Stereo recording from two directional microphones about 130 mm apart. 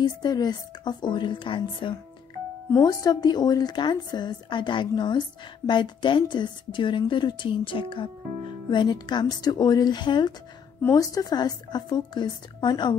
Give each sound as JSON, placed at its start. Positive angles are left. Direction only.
{"t": 0.0, "sound": "a woman's voice", "side_deg": 30}
{"t": 2.8, "sound": "a woman's voice", "side_deg": 30}
{"t": 10.8, "sound": "a woman's voice", "side_deg": 25}